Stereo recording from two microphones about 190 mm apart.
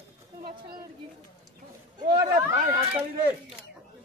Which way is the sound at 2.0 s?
20° right (ahead or behind).